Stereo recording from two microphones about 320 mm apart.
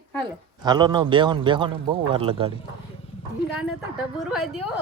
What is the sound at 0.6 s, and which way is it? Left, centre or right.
Speech, centre.